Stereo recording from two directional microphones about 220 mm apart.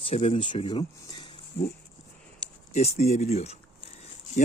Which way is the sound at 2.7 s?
30° left (ahead or behind).